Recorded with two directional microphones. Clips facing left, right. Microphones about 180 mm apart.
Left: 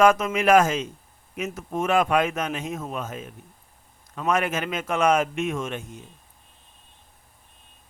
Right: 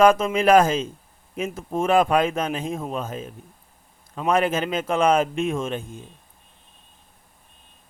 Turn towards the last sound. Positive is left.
turn(degrees=-30)  # may be behind; listen again after turning